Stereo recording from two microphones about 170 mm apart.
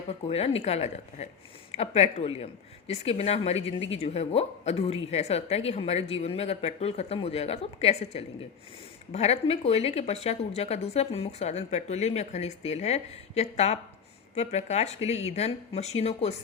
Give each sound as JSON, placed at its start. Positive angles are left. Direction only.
{"t": 0.3, "sound": "a woman's voice", "side_deg": 35}